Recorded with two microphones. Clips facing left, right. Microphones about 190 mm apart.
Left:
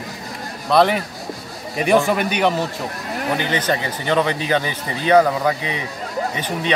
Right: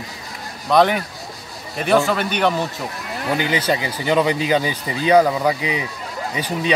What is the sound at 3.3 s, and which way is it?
Speech, 10° right (ahead or behind).